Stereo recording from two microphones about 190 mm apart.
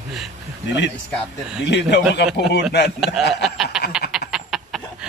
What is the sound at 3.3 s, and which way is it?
Snicker, centre (ahead or behind).